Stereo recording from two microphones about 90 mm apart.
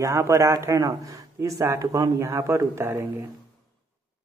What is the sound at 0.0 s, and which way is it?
Speech, 35° right (ahead or behind).